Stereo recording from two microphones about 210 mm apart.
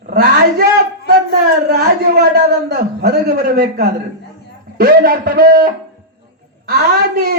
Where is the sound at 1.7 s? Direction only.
45° right (ahead or behind).